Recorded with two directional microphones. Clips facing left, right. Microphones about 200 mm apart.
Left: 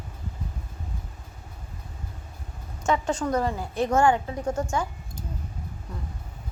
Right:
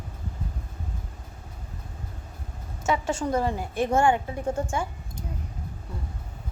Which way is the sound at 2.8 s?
25° right (ahead or behind).